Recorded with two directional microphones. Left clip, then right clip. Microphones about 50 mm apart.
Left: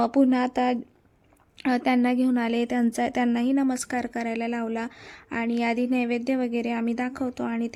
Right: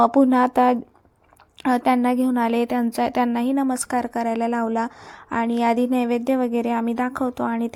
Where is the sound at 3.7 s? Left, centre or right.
Centre.